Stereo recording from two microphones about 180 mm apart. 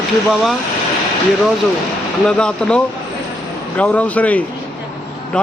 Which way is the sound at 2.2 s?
5° left (ahead or behind).